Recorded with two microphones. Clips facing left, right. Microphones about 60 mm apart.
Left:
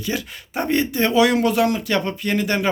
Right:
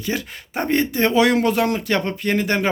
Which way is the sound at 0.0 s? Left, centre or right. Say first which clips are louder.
Right 1 dB; right.